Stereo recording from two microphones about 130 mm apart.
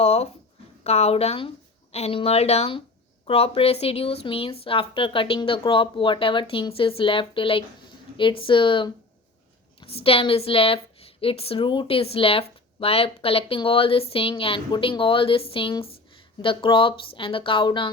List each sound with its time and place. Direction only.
0.0 s a woman's voice: 50° left (ahead or behind)